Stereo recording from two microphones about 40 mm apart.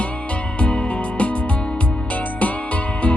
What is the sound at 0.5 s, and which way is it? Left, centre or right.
Music, left.